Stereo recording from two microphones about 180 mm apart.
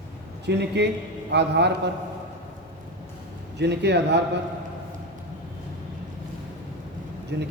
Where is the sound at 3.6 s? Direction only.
70° right (ahead or behind).